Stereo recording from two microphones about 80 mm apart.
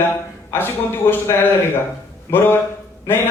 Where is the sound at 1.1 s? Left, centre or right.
Left.